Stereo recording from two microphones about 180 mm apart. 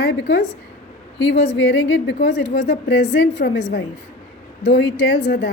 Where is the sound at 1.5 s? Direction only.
70° left (ahead or behind).